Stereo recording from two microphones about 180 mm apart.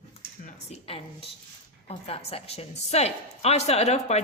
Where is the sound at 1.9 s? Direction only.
30° left (ahead or behind).